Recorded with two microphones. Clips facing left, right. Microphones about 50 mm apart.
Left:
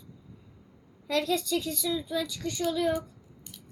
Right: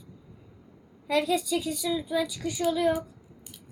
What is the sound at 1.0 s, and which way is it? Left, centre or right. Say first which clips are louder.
Speech: right 2 dB; centre.